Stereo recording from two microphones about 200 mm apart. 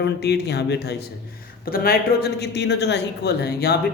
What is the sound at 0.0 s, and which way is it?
Speech, 55° left (ahead or behind).